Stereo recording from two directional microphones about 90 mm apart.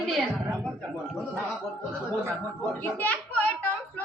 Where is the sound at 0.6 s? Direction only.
5° left (ahead or behind).